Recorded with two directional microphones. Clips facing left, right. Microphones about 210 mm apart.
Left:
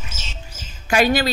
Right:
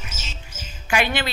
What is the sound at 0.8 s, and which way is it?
Speech, 40° left (ahead or behind).